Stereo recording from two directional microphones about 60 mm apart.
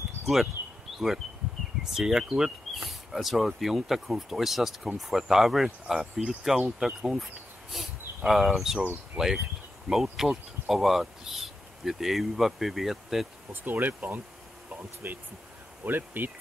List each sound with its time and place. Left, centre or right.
0.2 s a sound: centre
0.9 s speech: centre
9.1 s insect: centre
10.1 s speech: centre
13.5 s speech: right